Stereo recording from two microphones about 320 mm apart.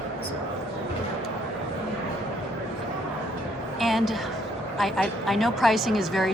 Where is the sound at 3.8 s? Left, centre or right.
Centre.